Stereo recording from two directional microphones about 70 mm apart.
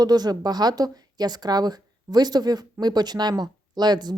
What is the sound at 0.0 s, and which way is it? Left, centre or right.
A woman's voice, right.